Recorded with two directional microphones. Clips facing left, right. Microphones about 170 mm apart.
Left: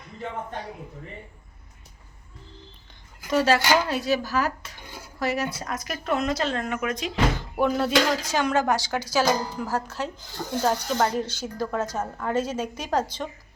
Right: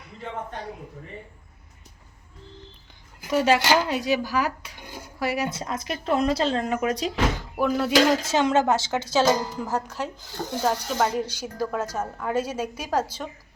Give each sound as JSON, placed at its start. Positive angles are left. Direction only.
{"t": 3.2, "sound": "speech", "side_deg": -15}
{"t": 5.5, "sound": "speech", "side_deg": -25}
{"t": 7.5, "sound": "speech", "side_deg": 0}
{"t": 7.9, "sound": "speech", "side_deg": -25}
{"t": 10.6, "sound": "speech", "side_deg": 0}